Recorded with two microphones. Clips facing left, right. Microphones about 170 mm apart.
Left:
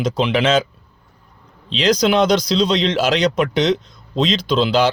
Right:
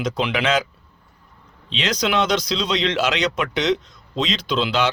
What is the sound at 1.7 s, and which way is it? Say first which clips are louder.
A man's voice: left 6 dB; 35° left (ahead or behind).